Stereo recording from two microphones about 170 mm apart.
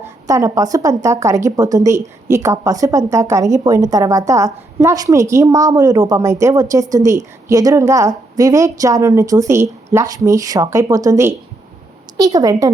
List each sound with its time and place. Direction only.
0.0 s a woman's voice: 15° right (ahead or behind)